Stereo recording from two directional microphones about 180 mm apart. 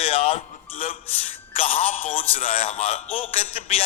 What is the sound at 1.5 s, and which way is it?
Music, 30° left (ahead or behind).